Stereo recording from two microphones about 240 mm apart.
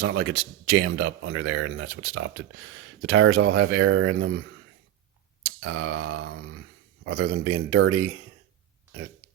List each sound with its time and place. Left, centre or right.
0.0 s speech: right
5.4 s a sound: right
7.0 s speech: right